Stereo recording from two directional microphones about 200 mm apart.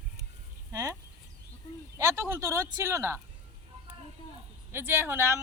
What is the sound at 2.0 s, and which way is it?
Speech, 15° right (ahead or behind).